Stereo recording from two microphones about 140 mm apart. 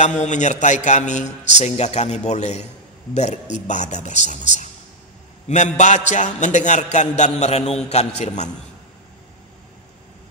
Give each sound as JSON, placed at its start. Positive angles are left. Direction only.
{"t": 0.0, "sound": "a man's voice", "side_deg": 60}